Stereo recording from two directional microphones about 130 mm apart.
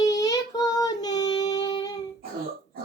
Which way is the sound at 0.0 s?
30° left (ahead or behind).